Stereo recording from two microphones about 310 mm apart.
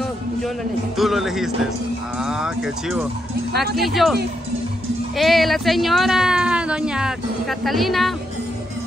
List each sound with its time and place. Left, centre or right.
0.9 s speech: centre